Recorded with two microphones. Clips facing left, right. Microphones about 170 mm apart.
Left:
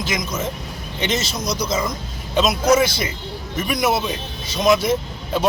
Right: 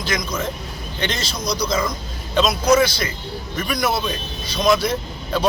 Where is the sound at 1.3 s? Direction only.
45° left (ahead or behind).